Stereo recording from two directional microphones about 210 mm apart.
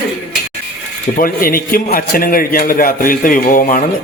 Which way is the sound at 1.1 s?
40° left (ahead or behind).